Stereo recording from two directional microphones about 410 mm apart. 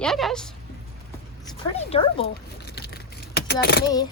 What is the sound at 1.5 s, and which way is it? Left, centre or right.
Speech, centre.